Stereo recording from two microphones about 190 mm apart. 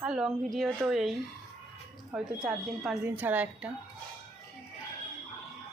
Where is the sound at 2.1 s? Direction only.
5° right (ahead or behind).